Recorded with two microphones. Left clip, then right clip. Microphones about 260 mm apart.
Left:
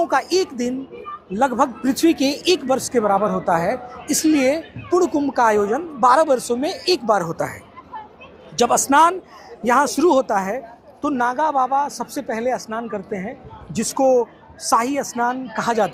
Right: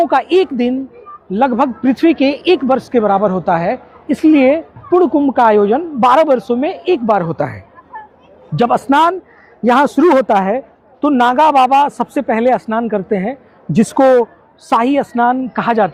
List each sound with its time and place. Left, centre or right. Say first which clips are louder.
0.1 s a woman's voice: right 7 dB; right
8.5 s a man's voice: right 3 dB; centre; by 13.3 s right
13.7 s a man's voice: right 7 dB; right
15.6 s a man's voice: right 6 dB; right